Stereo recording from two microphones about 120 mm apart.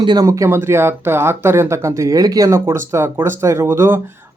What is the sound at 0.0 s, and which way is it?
Speech, 35° right (ahead or behind).